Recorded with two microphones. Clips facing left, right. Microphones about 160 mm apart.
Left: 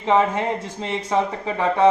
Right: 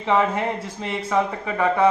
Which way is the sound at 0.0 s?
20° left (ahead or behind).